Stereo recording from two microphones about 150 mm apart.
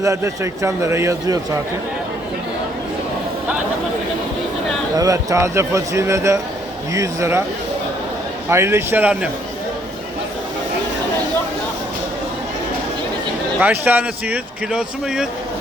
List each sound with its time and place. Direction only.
0.0 s speech: 20° right (ahead or behind)
4.9 s speech: 20° right (ahead or behind)
8.4 s speech: 15° right (ahead or behind)
13.6 s speech: 10° right (ahead or behind)